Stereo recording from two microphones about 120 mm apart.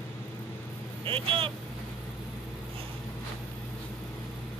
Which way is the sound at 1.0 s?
50° right (ahead or behind).